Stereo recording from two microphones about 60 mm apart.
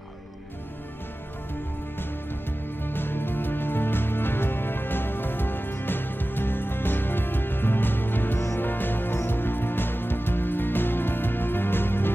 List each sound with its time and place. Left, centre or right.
2.8 s music: left